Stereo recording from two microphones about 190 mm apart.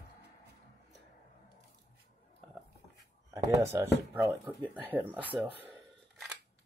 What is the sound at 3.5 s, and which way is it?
Speech, 15° right (ahead or behind).